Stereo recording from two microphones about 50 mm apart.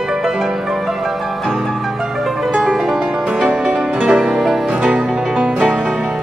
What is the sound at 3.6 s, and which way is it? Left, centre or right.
Music, centre.